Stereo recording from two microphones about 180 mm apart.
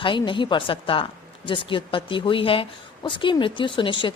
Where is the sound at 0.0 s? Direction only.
25° left (ahead or behind).